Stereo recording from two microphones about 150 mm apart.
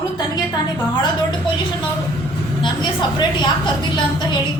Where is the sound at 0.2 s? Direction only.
25° left (ahead or behind).